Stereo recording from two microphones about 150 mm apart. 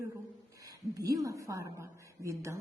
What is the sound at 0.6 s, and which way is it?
A woman's voice, 25° right (ahead or behind).